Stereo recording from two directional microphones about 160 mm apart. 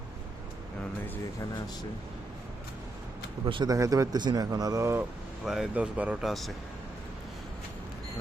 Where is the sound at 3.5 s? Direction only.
30° right (ahead or behind).